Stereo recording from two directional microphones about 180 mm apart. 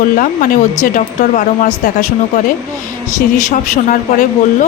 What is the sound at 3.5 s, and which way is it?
Speech, 45° left (ahead or behind).